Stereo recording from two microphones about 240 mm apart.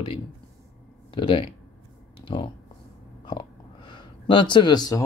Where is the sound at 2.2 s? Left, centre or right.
Left.